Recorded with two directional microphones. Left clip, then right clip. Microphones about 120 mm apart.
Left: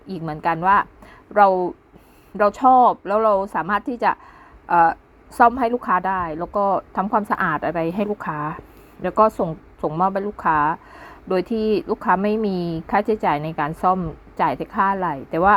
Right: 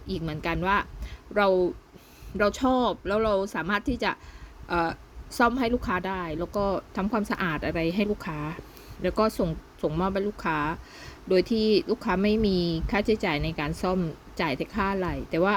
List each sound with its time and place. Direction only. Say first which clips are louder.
0.1 s a woman's voice: left 8 dB; 15° right (ahead or behind)
2.4 s a woman's voice: left 10 dB; 15° right (ahead or behind)
11.4 s speech: left 3 dB; 25° left (ahead or behind)
11.7 s a woman's voice: left 6 dB; 15° right (ahead or behind)